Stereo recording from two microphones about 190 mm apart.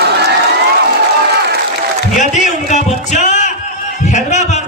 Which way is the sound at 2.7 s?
40° left (ahead or behind).